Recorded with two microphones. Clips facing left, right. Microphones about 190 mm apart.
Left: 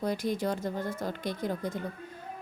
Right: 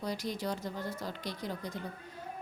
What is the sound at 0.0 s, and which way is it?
Speech, 50° left (ahead or behind).